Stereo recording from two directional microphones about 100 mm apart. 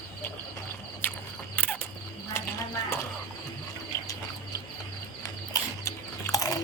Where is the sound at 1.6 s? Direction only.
20° left (ahead or behind).